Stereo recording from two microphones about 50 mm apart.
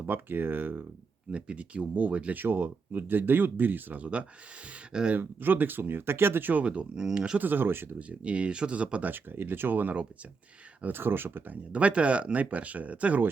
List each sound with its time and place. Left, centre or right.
0.0 s speech: right
1.3 s speech: right
2.4 s speech: right
4.9 s speech: centre
5.1 s speech: right
6.7 s speech: centre
7.3 s speech: right
7.9 s speech: right
9.0 s speech: right
10.9 s speech: right
11.5 s speech: right